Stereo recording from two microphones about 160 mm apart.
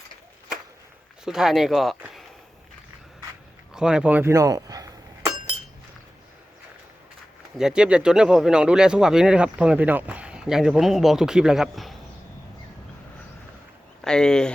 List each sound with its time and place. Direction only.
1.2 s speech: 5° right (ahead or behind)
3.8 s chink: 5° right (ahead or behind); by 5.3 s 20° right (ahead or behind)
7.6 s speech: 5° right (ahead or behind)
14.0 s speech: 5° left (ahead or behind)